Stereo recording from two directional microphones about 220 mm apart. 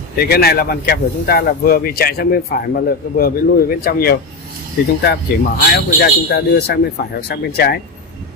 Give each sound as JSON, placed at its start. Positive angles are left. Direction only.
{"t": 0.2, "sound": "speech", "side_deg": 45}